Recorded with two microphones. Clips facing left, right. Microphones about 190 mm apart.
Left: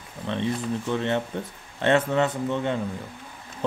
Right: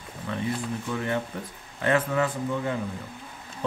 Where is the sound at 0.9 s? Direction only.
25° left (ahead or behind).